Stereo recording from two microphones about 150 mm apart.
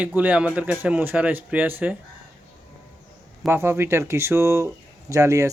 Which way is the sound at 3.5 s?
15° right (ahead or behind).